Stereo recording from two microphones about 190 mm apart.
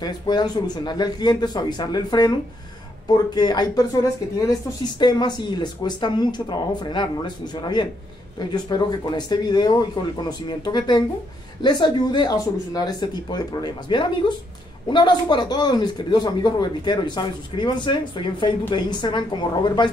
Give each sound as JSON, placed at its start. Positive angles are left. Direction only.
{"t": 0.0, "sound": "speech", "side_deg": 20}